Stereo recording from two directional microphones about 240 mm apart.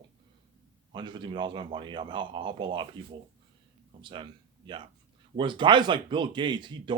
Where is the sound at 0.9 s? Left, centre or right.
Centre.